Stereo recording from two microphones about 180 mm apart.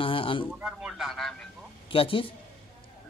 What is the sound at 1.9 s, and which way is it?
Speech, 30° left (ahead or behind).